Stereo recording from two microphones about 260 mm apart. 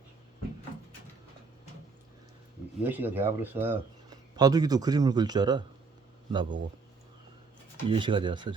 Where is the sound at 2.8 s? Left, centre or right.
Centre.